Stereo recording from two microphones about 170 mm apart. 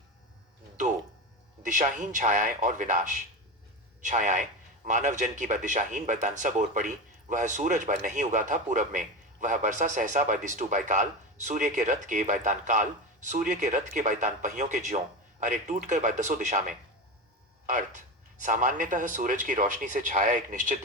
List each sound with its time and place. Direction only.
1.6 s speech: 50° right (ahead or behind)